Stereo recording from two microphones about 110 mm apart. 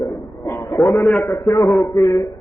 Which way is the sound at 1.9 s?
30° left (ahead or behind).